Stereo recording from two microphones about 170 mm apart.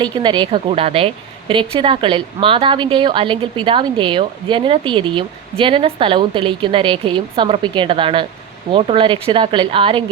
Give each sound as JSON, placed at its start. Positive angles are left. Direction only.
{"t": 0.0, "sound": "a woman's voice", "side_deg": -25}